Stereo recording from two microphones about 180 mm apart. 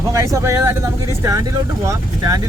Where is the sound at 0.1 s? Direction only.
15° right (ahead or behind).